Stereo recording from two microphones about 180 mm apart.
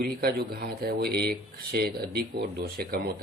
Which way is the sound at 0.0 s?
60° right (ahead or behind).